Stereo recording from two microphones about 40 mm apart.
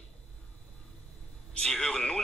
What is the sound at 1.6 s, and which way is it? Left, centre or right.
Speech, centre.